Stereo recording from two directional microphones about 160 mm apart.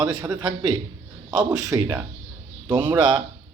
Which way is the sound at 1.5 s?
20° right (ahead or behind).